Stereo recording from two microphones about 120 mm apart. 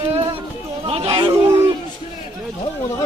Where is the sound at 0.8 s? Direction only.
55° right (ahead or behind).